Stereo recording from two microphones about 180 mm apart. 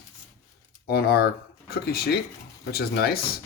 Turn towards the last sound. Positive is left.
turn(degrees=60)  # may be behind; listen again after turning